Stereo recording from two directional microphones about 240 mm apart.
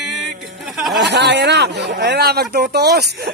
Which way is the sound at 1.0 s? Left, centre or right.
Right.